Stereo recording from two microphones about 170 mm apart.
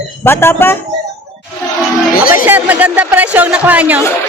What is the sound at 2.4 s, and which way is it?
Speech, 10° right (ahead or behind).